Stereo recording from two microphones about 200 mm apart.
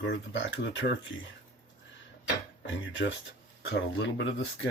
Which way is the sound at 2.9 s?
65° left (ahead or behind).